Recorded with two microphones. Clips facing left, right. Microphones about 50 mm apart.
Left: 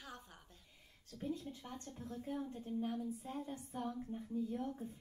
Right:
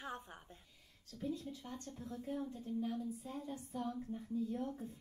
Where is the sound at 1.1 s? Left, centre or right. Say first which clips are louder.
Right 1 dB; left.